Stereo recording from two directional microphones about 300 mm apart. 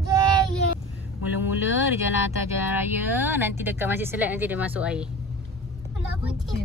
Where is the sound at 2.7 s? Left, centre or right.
Centre.